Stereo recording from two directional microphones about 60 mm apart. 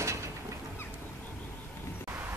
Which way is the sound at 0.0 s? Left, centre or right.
Right.